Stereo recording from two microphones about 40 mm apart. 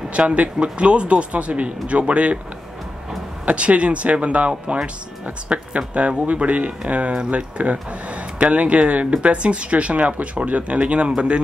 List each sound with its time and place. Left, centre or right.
0.1 s speech: right
3.4 s speech: right